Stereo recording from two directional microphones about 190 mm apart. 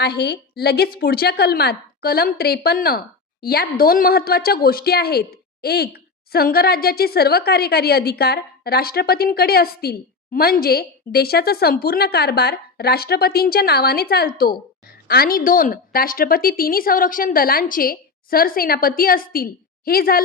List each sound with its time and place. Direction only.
0.0 s a woman's voice: 60° left (ahead or behind)